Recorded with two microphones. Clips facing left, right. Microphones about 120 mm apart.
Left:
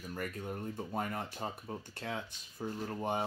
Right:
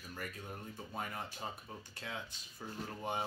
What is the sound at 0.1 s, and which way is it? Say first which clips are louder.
Speech: left 6 dB; 45° left (ahead or behind).